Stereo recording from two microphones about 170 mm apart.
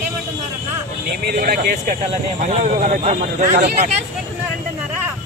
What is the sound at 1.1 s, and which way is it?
Speech, 65° right (ahead or behind).